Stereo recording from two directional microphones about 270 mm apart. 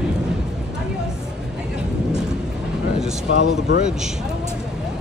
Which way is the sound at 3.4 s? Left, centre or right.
Left.